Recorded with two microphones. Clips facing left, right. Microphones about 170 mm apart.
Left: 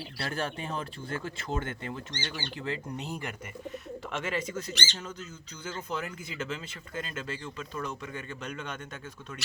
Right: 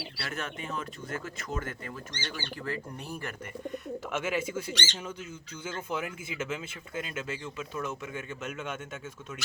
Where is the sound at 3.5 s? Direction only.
Centre (ahead or behind).